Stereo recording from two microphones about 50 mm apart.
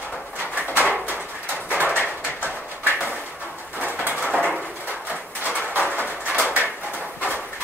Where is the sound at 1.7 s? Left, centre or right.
Right.